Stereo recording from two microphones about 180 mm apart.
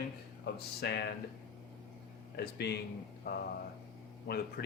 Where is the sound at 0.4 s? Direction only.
65° left (ahead or behind).